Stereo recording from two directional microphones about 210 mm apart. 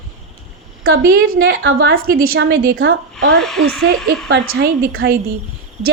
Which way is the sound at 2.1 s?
45° right (ahead or behind).